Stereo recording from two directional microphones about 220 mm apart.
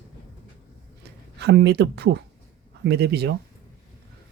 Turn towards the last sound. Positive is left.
turn(degrees=-50)  # may be behind; listen again after turning